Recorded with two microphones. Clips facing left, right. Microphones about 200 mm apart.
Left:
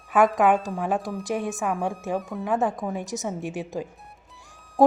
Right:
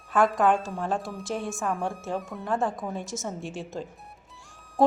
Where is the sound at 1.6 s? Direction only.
Centre (ahead or behind).